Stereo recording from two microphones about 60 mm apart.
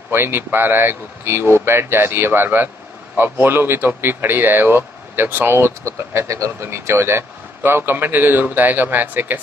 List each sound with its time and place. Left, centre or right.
0.1 s speech: right
5.9 s speech: right